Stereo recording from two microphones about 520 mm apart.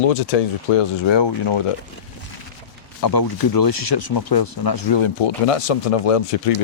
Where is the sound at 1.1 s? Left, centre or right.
Left.